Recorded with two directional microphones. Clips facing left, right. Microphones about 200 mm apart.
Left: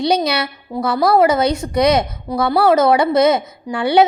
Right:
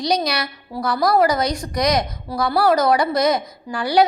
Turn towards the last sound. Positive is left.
turn(degrees=25)  # may be behind; listen again after turning